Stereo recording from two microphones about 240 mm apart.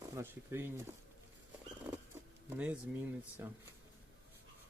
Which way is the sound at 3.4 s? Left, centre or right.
Centre.